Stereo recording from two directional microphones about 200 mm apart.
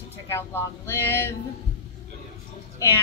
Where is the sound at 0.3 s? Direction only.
10° left (ahead or behind).